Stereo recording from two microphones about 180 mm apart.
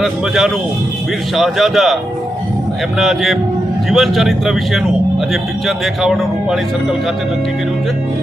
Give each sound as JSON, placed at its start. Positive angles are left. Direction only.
{"t": 0.0, "sound": "speech", "side_deg": 0}
{"t": 3.0, "sound": "speech", "side_deg": 0}